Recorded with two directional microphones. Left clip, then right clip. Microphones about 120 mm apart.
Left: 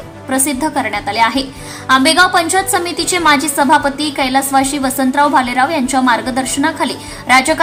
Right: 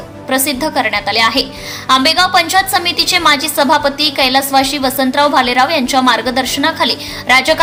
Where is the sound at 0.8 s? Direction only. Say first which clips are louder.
Right 2 dB; 30° right (ahead or behind).